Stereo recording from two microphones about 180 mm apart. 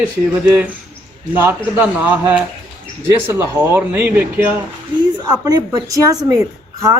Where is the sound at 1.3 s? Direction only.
10° right (ahead or behind).